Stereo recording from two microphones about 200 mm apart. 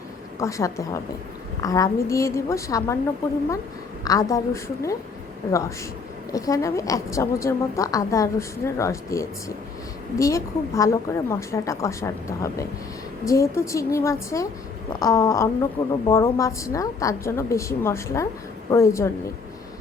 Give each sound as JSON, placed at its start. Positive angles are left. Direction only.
{"t": 0.3, "sound": "a woman's voice", "side_deg": 15}
{"t": 4.0, "sound": "a woman's voice", "side_deg": 20}